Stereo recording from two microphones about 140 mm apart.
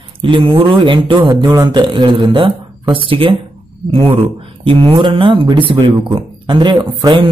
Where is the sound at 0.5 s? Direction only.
40° right (ahead or behind).